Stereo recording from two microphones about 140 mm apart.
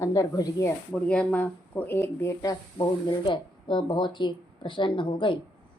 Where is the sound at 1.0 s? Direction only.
10° left (ahead or behind).